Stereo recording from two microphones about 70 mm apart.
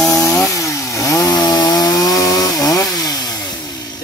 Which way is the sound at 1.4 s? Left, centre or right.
Left.